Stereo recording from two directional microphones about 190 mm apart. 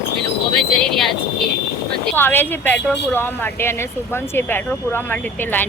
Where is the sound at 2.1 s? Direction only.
10° left (ahead or behind).